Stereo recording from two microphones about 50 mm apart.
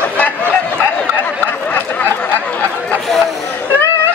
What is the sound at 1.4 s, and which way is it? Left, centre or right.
A woman's voice, left.